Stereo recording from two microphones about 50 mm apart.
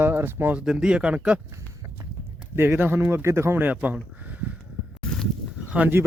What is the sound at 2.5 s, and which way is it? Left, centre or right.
Speech, right.